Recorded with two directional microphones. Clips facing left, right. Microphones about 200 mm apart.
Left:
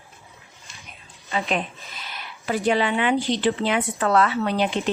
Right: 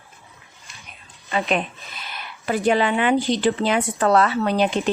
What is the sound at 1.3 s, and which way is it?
Speech, 60° right (ahead or behind).